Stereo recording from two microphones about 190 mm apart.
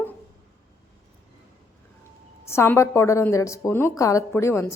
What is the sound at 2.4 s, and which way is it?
Speech, 15° left (ahead or behind).